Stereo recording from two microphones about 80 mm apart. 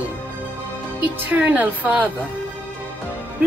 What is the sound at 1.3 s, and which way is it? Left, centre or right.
Speech, centre.